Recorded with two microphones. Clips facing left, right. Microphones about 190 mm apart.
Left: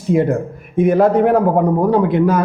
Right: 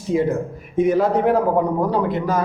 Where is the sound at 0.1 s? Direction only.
55° left (ahead or behind).